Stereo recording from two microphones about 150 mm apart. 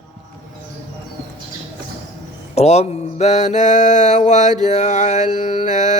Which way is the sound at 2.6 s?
45° left (ahead or behind).